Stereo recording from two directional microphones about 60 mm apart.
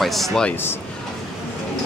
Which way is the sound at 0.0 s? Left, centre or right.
Centre.